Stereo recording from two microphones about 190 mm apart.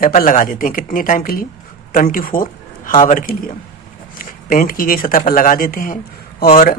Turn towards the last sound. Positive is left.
turn(degrees=45)  # may be behind; listen again after turning